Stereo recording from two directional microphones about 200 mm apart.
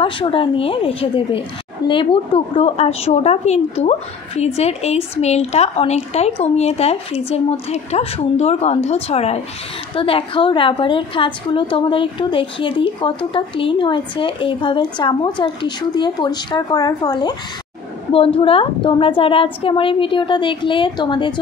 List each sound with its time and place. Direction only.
0.0 s a woman's voice: 25° left (ahead or behind)